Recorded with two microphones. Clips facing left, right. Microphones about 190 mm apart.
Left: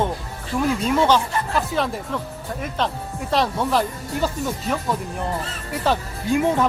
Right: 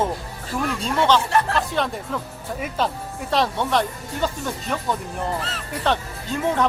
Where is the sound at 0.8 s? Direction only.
10° left (ahead or behind).